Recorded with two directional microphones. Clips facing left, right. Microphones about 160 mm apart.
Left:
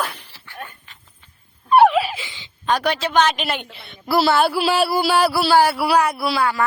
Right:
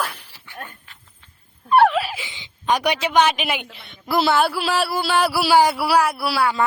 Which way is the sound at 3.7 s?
5° left (ahead or behind).